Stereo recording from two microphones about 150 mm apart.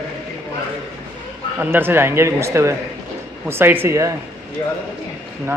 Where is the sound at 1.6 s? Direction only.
15° right (ahead or behind).